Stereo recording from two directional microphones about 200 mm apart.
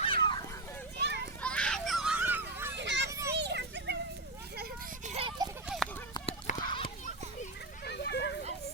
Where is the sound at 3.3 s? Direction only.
60° right (ahead or behind).